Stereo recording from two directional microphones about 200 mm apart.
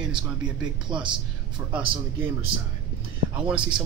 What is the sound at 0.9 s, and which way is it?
Speech, 25° right (ahead or behind).